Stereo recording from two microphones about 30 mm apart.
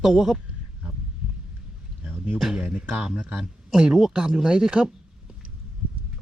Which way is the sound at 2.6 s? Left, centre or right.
Right.